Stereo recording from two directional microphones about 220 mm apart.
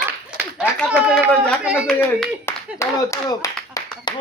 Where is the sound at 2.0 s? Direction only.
10° left (ahead or behind).